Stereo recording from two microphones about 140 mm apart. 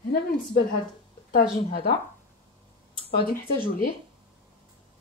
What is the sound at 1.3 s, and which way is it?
Speech, 90° left.